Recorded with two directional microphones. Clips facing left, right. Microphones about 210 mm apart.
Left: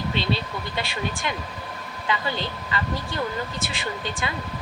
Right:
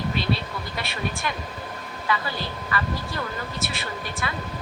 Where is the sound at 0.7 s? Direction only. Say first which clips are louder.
Left 1 dB; 25° left (ahead or behind).